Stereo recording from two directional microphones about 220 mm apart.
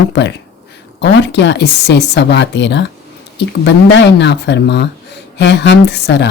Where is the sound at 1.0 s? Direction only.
50° left (ahead or behind).